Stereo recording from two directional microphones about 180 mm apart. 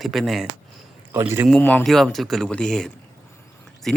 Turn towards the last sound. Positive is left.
turn(degrees=5)  # may be behind; listen again after turning